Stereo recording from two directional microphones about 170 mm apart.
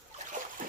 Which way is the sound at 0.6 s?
55° right (ahead or behind).